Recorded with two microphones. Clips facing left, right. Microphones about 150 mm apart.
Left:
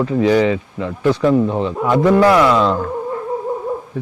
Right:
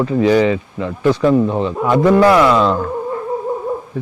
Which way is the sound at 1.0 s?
40° right (ahead or behind).